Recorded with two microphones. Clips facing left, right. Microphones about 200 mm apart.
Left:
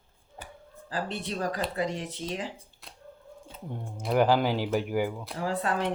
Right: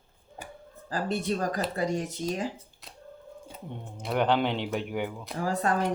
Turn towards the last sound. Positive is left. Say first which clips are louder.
# right 2 dB
turn(degrees=-40)  # may be behind; listen again after turning